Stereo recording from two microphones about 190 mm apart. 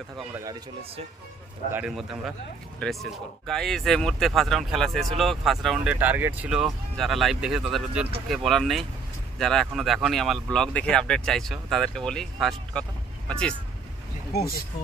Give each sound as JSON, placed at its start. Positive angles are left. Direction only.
{"t": 0.2, "sound": "speech", "side_deg": -15}
{"t": 1.7, "sound": "speech", "side_deg": -5}
{"t": 14.3, "sound": "speech", "side_deg": 55}